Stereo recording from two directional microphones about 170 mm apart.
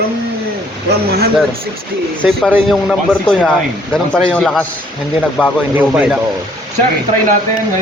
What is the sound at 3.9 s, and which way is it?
A man's voice, 5° left (ahead or behind).